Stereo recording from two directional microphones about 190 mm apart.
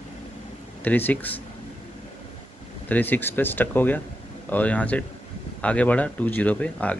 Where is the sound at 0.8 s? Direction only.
10° left (ahead or behind).